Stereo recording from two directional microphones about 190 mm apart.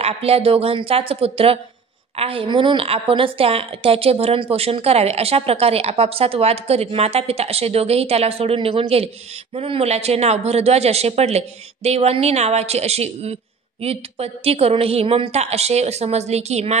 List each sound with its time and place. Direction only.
0.0 s a woman's voice: 30° right (ahead or behind)